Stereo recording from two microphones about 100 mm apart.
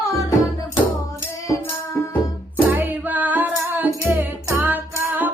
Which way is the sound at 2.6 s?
15° right (ahead or behind).